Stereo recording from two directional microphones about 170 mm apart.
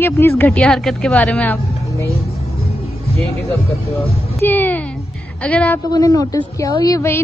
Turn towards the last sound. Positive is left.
turn(degrees=15)  # may be behind; listen again after turning